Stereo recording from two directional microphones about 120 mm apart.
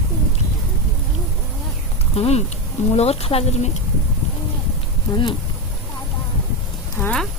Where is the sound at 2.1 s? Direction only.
55° left (ahead or behind).